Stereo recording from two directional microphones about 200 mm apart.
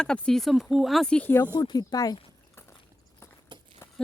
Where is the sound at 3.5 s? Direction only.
25° right (ahead or behind).